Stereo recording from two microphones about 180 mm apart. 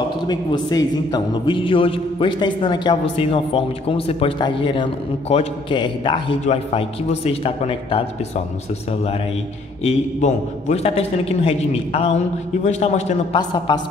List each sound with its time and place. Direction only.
0.3 s a man's voice: 20° left (ahead or behind)
9.8 s a man's voice: 35° left (ahead or behind)
13.7 s a man's voice: 25° left (ahead or behind)